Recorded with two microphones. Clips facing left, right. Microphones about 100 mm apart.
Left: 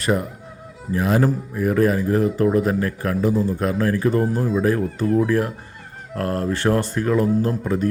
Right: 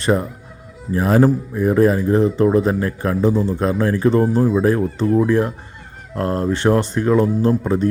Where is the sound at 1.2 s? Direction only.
25° right (ahead or behind).